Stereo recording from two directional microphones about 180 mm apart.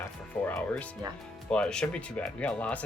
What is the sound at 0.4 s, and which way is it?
Speech, 10° left (ahead or behind).